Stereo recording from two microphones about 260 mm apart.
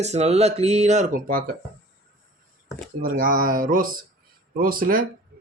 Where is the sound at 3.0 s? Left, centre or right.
Right.